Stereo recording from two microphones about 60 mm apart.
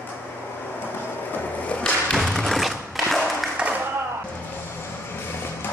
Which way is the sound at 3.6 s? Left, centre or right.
Centre.